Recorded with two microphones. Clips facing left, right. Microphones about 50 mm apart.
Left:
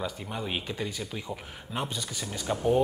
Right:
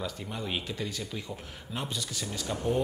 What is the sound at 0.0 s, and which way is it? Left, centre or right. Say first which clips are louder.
Speech: left 2 dB; centre.